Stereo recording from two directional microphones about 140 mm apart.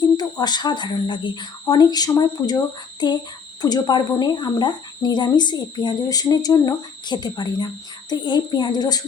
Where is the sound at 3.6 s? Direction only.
30° left (ahead or behind).